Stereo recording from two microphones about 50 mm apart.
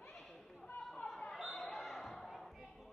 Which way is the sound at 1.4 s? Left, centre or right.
Centre.